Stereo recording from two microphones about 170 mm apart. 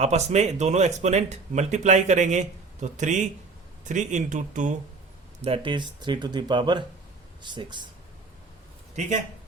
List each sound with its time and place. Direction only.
0.0 s speech: 40° right (ahead or behind)
5.4 s speech: 30° right (ahead or behind)
9.0 s speech: 45° right (ahead or behind)